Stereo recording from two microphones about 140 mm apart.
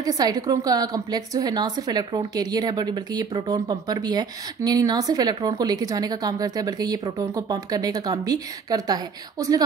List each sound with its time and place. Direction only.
0.0 s a woman's voice: 25° right (ahead or behind)